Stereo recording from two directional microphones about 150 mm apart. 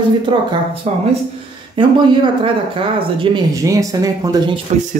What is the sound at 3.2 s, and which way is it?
Speech, 25° right (ahead or behind).